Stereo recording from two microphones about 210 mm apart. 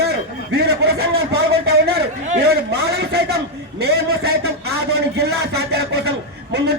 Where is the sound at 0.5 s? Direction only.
50° right (ahead or behind).